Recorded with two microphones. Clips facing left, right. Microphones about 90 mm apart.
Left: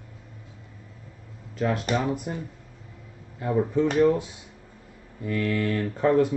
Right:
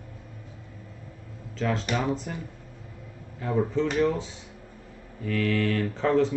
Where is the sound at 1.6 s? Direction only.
15° left (ahead or behind).